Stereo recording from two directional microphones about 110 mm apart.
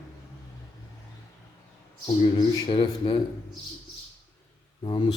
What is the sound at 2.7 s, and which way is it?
Speech, 55° left (ahead or behind).